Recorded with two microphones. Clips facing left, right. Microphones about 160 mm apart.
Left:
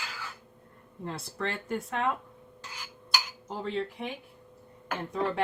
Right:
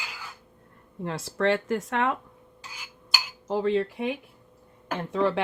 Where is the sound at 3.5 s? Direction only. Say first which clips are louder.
Right 9 dB; 90° right.